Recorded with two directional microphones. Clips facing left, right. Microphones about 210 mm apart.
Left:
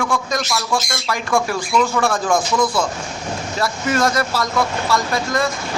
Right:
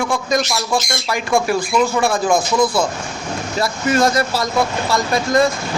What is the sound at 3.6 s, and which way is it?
Speech, 30° right (ahead or behind).